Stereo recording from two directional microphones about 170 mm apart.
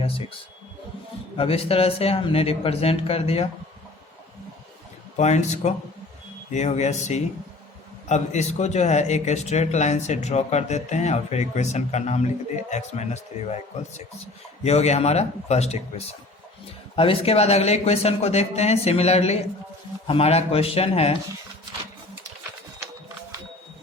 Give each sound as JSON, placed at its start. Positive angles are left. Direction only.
{"t": 1.4, "sound": "speech", "side_deg": 35}
{"t": 5.1, "sound": "speech", "side_deg": 45}
{"t": 14.6, "sound": "speech", "side_deg": 40}